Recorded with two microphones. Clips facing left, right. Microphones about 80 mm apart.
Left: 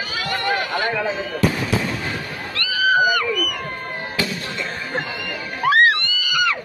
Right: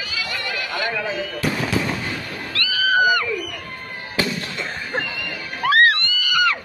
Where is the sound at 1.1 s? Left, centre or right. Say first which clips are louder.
Left 1 dB; left.